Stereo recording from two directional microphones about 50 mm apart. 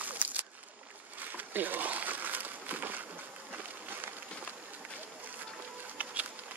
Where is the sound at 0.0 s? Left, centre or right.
Right.